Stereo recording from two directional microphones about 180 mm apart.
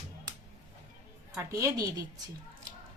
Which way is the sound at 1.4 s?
15° right (ahead or behind).